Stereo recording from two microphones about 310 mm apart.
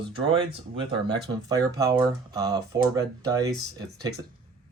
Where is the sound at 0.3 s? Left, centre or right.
Centre.